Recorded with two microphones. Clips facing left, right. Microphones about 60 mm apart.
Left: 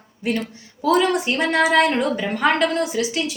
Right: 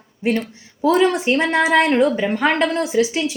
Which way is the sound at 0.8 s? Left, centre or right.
Right.